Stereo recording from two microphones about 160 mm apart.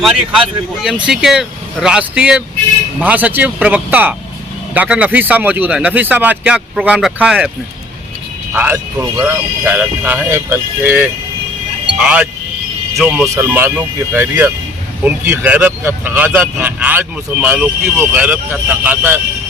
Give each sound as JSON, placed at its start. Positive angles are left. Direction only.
{"t": 0.0, "sound": "speech", "side_deg": -5}
{"t": 8.5, "sound": "speech", "side_deg": -10}
{"t": 13.3, "sound": "speech", "side_deg": -15}